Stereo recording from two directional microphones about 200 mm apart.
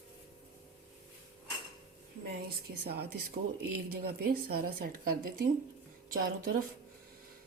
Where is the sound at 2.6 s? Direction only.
50° right (ahead or behind).